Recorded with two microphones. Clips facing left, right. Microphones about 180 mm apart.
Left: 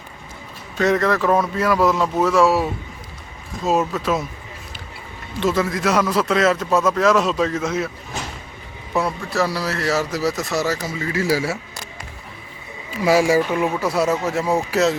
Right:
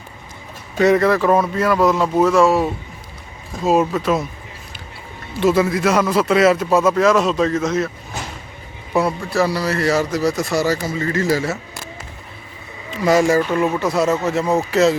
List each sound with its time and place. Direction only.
0.8 s speech: 10° right (ahead or behind)
3.6 s speech: 10° right (ahead or behind)
5.4 s speech: 10° right (ahead or behind)
9.0 s speech: centre (ahead or behind)
13.1 s speech: 5° left (ahead or behind)